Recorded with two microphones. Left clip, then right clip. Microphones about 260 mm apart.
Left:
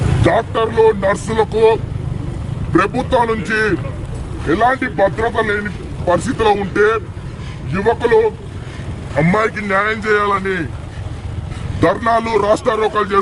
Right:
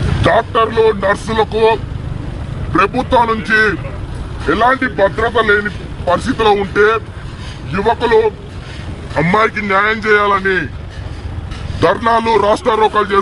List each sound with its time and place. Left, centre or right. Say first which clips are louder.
0.2 s speech: right 3 dB; centre
11.8 s speech: right 2 dB; centre